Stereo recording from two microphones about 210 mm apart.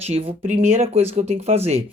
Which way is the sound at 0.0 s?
30° right (ahead or behind).